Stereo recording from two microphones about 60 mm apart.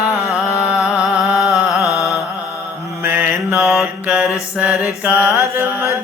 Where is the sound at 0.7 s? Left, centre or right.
Centre.